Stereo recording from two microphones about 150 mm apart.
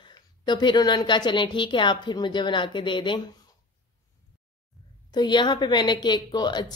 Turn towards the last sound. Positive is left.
turn(degrees=30)  # may be behind; listen again after turning